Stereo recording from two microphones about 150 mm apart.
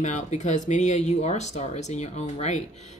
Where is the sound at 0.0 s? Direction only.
50° left (ahead or behind).